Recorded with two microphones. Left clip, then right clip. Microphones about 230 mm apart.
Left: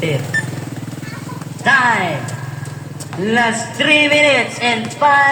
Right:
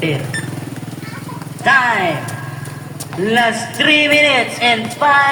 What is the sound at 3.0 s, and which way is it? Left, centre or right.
A man's voice, right.